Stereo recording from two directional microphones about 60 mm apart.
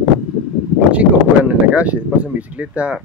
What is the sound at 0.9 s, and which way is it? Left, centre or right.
Speech, right.